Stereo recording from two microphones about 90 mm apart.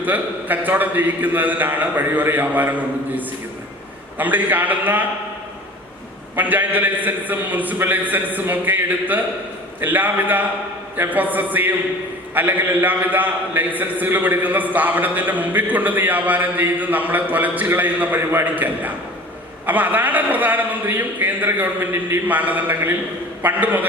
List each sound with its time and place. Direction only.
0.0 s a man's voice: 20° right (ahead or behind)
6.3 s a man's voice: 20° right (ahead or behind)